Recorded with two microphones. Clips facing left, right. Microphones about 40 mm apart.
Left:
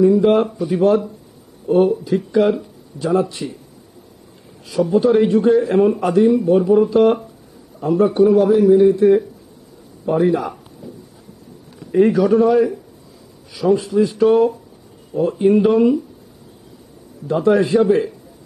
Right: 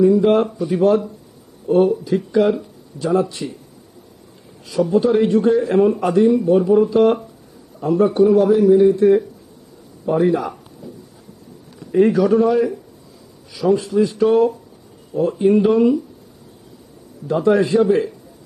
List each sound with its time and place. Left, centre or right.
0.0 s a man's voice: centre
4.6 s a man's voice: centre
11.8 s a man's voice: centre
17.2 s a man's voice: centre